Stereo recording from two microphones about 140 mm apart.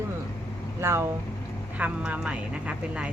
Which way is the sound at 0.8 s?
15° right (ahead or behind).